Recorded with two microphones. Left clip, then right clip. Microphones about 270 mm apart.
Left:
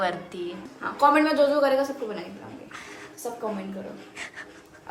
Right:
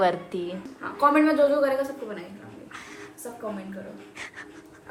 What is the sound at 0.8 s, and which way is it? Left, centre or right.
Speech, left.